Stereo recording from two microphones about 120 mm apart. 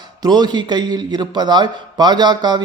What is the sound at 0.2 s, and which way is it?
A man's voice, 35° right (ahead or behind).